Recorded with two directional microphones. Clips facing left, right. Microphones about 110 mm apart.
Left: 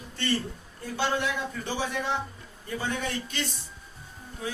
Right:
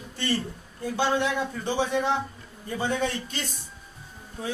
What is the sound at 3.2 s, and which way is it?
Speech, 40° right (ahead or behind).